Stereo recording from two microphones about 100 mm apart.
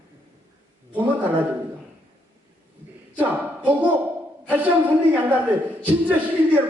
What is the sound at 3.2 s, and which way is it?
A man's voice, 15° right (ahead or behind).